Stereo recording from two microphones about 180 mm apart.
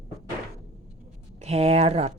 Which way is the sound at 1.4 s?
35° right (ahead or behind).